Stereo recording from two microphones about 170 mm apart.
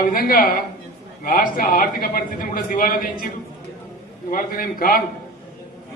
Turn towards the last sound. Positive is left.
turn(degrees=55)  # may be behind; listen again after turning